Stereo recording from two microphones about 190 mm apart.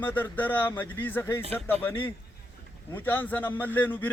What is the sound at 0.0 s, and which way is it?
A man's voice, 10° left (ahead or behind).